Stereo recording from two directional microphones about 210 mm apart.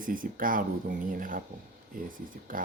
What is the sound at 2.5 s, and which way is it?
Speech, 40° right (ahead or behind).